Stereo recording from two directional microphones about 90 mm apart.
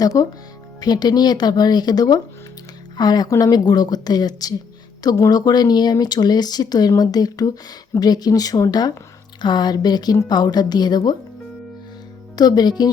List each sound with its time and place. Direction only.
0.0 s speech: 40° left (ahead or behind)
9.4 s speech: 55° left (ahead or behind)
12.4 s speech: 50° left (ahead or behind)